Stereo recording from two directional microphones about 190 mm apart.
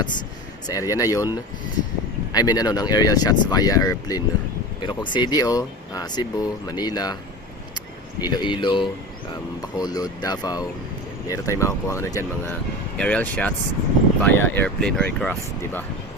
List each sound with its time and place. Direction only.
0.7 s speech: 15° left (ahead or behind)
2.3 s speech: 20° left (ahead or behind)
8.2 s speech: 25° left (ahead or behind); by 15.8 s 5° left (ahead or behind)